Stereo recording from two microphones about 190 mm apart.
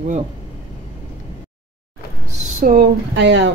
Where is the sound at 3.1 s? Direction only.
65° right (ahead or behind).